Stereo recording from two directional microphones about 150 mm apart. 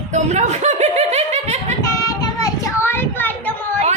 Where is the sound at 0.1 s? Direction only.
50° right (ahead or behind).